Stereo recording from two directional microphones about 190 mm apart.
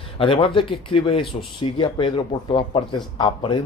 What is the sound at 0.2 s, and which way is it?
Speech, 25° left (ahead or behind).